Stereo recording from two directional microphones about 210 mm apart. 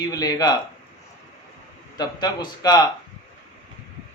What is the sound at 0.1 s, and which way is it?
Speech, 20° left (ahead or behind).